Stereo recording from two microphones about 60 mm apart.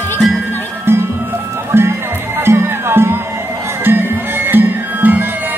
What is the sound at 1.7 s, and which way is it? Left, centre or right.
Music, right.